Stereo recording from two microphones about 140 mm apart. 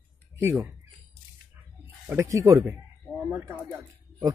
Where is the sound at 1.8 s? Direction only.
20° right (ahead or behind).